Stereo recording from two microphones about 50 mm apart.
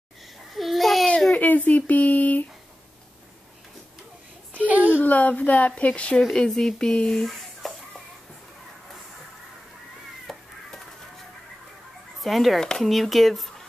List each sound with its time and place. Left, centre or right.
0.6 s babbling: centre
1.3 s speech: left
4.6 s a sound: right
5.0 s speech: left
6.3 s speech: centre
7.2 s a sound: centre
10.3 s crow: centre
12.2 s speech: centre
12.5 s speech: centre